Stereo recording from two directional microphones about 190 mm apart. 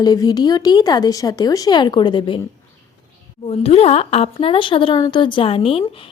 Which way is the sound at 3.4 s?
30° left (ahead or behind).